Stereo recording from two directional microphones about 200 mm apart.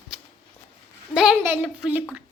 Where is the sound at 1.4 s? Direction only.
5° right (ahead or behind).